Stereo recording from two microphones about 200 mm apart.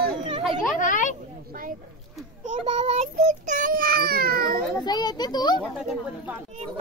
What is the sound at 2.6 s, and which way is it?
A child's voice, 30° right (ahead or behind).